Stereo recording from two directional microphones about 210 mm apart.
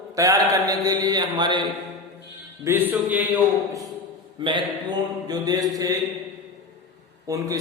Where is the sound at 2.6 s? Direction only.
10° right (ahead or behind).